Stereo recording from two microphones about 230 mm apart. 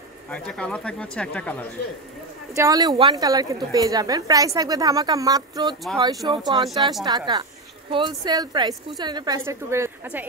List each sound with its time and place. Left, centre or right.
0.3 s speech: centre
2.5 s a woman's voice: centre